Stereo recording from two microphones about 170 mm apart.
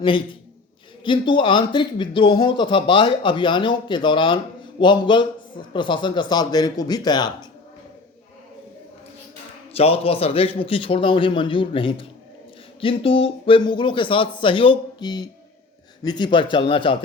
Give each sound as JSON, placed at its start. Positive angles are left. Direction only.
{"t": 0.0, "sound": "speech", "side_deg": 30}
{"t": 9.7, "sound": "a man's voice", "side_deg": 35}